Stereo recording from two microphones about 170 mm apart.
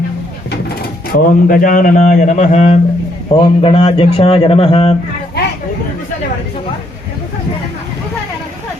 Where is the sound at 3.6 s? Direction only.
35° left (ahead or behind).